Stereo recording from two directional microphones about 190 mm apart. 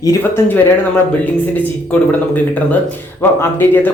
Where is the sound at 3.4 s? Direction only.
10° left (ahead or behind).